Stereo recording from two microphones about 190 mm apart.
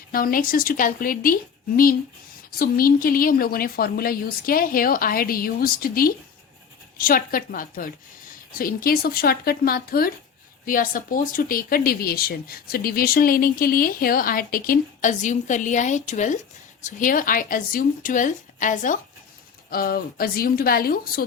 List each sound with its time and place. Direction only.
0.1 s speech: 50° left (ahead or behind)